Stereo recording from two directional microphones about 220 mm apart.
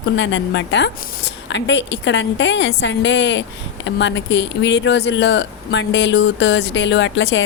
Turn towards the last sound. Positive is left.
turn(degrees=55)  # may be behind; listen again after turning